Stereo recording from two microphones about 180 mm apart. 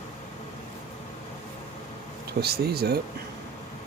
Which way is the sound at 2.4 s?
60° right (ahead or behind).